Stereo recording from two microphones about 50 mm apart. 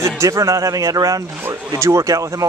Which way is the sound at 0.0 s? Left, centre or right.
Right.